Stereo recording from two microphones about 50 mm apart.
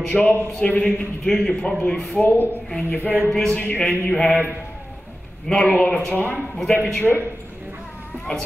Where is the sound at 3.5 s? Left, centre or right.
Left.